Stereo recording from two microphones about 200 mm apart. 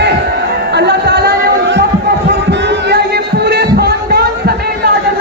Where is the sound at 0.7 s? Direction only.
55° right (ahead or behind).